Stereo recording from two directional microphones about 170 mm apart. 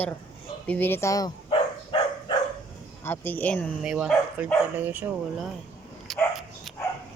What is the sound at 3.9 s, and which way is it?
Speech, 5° right (ahead or behind).